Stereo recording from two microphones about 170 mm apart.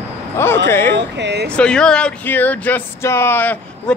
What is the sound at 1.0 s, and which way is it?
Speech, 90° right.